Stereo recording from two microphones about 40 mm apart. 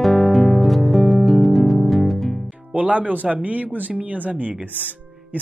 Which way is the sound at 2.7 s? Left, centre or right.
Right.